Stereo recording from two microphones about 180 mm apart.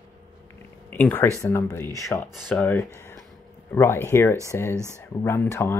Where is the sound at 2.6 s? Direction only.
10° left (ahead or behind).